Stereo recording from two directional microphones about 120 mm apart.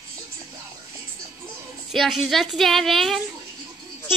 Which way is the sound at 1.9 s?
Centre (ahead or behind).